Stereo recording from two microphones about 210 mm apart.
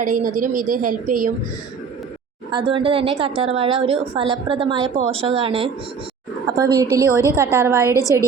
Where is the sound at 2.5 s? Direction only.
25° right (ahead or behind).